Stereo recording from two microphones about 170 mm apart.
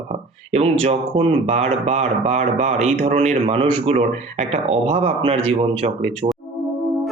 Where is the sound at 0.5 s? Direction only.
35° right (ahead or behind).